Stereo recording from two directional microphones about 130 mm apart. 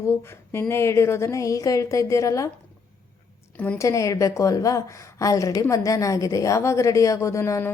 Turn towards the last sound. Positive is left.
turn(degrees=20)  # may be behind; listen again after turning